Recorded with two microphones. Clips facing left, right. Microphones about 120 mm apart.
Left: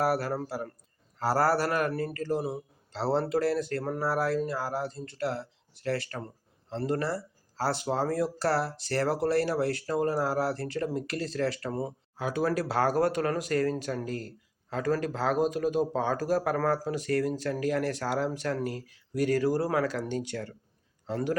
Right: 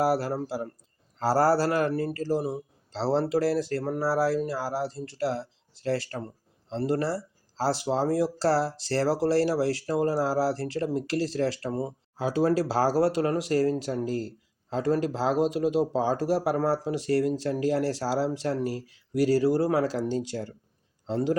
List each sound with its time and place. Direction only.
0.0 s speech: 25° right (ahead or behind)